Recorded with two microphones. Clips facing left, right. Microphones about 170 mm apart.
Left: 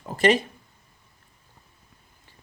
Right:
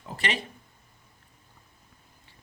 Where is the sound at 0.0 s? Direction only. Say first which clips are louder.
Left 12 dB; 45° left (ahead or behind).